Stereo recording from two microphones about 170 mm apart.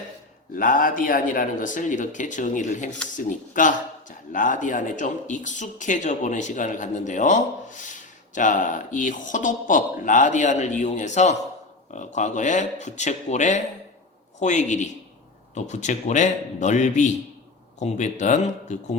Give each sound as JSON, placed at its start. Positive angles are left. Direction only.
{"t": 0.5, "sound": "speech", "side_deg": 55}